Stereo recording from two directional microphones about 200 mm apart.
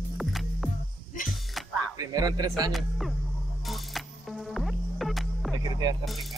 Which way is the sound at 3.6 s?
Centre (ahead or behind).